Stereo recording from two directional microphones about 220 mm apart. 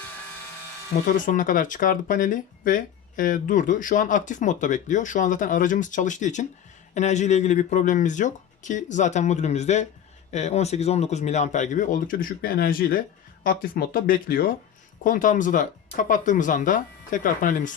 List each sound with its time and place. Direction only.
1.0 s speech: 35° left (ahead or behind)